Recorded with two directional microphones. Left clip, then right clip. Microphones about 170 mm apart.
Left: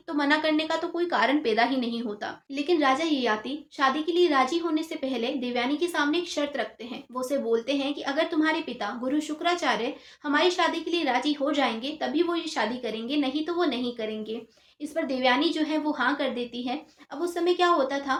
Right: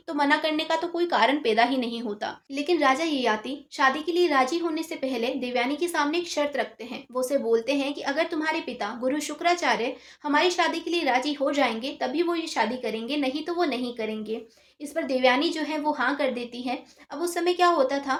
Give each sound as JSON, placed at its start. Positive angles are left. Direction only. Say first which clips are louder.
{"t": 0.1, "sound": "a woman's voice", "louder": "right 1 dB", "side_deg": -35}